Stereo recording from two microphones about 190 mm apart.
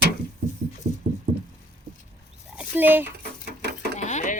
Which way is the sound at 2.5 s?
10° right (ahead or behind).